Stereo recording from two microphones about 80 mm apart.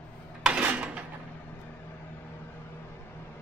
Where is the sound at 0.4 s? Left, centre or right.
Centre.